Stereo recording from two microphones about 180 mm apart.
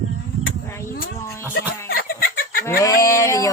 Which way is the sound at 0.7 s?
15° left (ahead or behind).